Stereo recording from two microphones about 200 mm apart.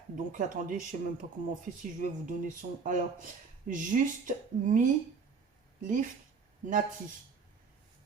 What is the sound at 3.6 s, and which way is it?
Speech, 40° right (ahead or behind).